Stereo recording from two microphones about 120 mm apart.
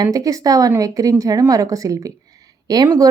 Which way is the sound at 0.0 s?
30° right (ahead or behind).